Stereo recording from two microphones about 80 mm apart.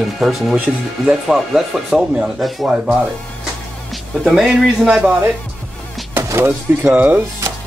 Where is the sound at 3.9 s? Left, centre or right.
Centre.